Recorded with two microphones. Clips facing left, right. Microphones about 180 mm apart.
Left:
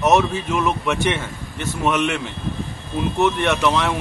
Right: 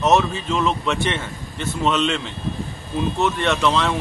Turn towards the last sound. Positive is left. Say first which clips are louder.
# even
turn(degrees=15)  # may be behind; listen again after turning